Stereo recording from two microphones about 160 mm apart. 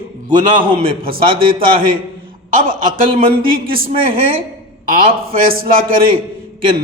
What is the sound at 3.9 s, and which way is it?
Speech, 35° right (ahead or behind).